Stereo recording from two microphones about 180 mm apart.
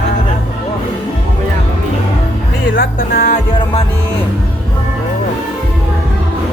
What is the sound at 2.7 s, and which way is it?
Music, 50° left (ahead or behind).